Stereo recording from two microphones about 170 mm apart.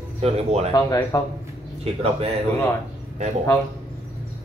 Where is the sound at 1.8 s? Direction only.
35° right (ahead or behind).